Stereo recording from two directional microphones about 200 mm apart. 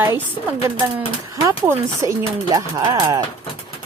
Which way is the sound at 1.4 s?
15° right (ahead or behind).